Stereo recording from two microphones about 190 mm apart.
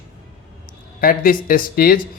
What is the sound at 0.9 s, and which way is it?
Speech, 50° left (ahead or behind).